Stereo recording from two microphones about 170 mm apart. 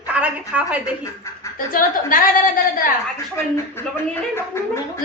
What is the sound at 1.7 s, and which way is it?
Speech, 55° left (ahead or behind).